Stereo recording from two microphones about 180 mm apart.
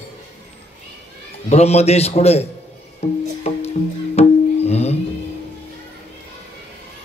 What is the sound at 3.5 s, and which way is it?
Music, 35° left (ahead or behind).